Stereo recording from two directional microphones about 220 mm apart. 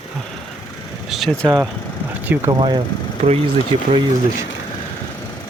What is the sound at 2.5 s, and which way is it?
Speech, 20° right (ahead or behind).